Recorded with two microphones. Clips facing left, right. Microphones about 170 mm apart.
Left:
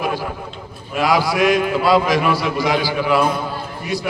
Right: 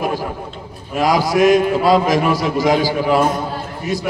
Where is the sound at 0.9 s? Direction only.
45° right (ahead or behind).